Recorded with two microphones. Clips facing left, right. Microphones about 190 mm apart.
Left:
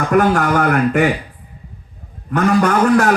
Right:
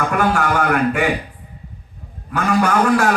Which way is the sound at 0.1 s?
40° left (ahead or behind).